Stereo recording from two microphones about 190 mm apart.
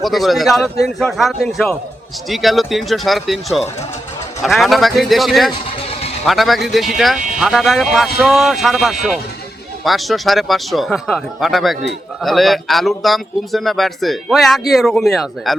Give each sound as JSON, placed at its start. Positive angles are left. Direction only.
{"t": 0.0, "sound": "speech", "side_deg": 0}
{"t": 5.8, "sound": "a sound", "side_deg": 30}
{"t": 6.2, "sound": "speech", "side_deg": 0}